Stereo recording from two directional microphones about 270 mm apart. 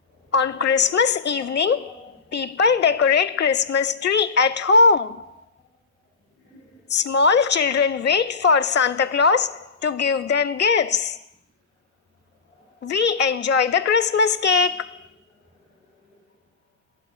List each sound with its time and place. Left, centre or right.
0.3 s a woman's voice: left
6.8 s a woman's voice: left
12.8 s a woman's voice: left